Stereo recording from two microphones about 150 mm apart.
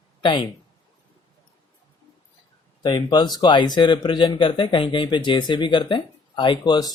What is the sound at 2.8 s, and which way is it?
Speech, 30° left (ahead or behind).